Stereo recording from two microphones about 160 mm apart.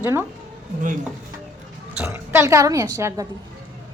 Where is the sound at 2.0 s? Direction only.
15° right (ahead or behind).